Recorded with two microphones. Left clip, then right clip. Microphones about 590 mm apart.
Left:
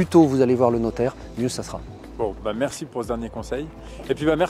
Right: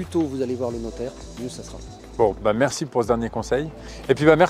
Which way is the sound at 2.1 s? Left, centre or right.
Right.